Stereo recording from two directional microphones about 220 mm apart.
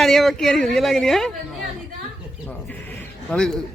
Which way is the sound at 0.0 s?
Centre (ahead or behind).